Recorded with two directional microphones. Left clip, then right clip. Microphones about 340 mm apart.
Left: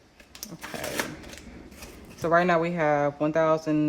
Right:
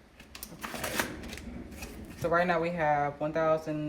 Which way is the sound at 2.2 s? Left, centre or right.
Left.